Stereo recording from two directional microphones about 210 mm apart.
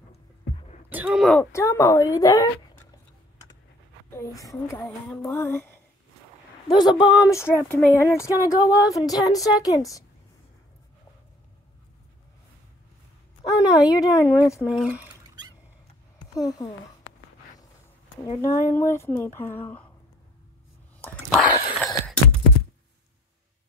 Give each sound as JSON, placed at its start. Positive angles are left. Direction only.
{"t": 0.8, "sound": "speech", "side_deg": -5}
{"t": 1.5, "sound": "speech", "side_deg": 15}
{"t": 4.1, "sound": "speech", "side_deg": 15}
{"t": 6.7, "sound": "speech", "side_deg": 20}
{"t": 13.7, "sound": "speech", "side_deg": 15}
{"t": 14.2, "sound": "speech", "side_deg": -10}
{"t": 16.2, "sound": "speech", "side_deg": 20}
{"t": 18.5, "sound": "speech", "side_deg": 40}
{"t": 18.8, "sound": "speech", "side_deg": 10}
{"t": 21.0, "sound": "a sound", "side_deg": 5}